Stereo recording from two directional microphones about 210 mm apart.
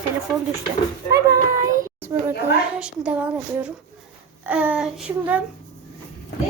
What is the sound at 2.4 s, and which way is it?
A woman's voice, 5° right (ahead or behind).